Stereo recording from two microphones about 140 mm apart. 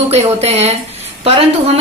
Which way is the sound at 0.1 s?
50° right (ahead or behind).